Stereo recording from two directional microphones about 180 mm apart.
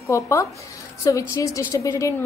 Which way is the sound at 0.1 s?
15° left (ahead or behind).